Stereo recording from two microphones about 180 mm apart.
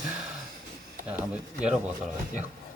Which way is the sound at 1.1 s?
5° right (ahead or behind).